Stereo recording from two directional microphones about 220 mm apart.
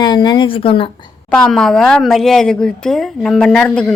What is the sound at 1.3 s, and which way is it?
A woman's voice, 5° left (ahead or behind).